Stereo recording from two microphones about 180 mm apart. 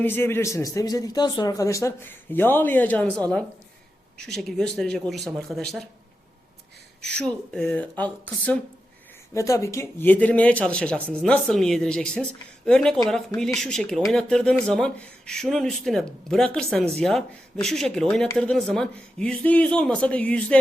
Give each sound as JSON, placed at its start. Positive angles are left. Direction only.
{"t": 0.0, "sound": "a man's voice", "side_deg": 10}
{"t": 4.3, "sound": "speech", "side_deg": 0}
{"t": 7.0, "sound": "a man's voice", "side_deg": 5}